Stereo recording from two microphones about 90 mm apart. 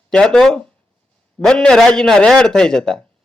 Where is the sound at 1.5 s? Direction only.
5° left (ahead or behind).